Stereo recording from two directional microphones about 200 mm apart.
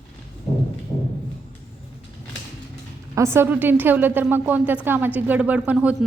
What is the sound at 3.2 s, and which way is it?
A woman's voice, 10° right (ahead or behind).